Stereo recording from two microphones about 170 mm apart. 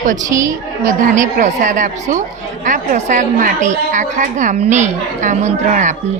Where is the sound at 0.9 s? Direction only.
50° right (ahead or behind).